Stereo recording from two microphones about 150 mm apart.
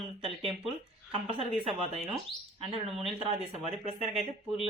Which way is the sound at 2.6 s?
40° right (ahead or behind).